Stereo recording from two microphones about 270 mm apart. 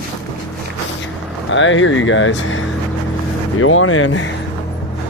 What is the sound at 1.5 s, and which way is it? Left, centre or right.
Speech, left.